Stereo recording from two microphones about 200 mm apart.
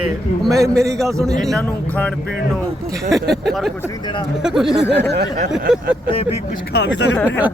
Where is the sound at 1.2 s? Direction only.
Centre (ahead or behind).